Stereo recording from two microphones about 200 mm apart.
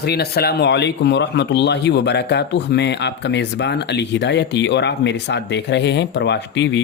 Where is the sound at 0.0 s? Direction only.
55° left (ahead or behind).